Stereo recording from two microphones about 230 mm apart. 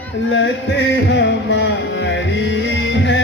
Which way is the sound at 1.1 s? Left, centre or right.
Left.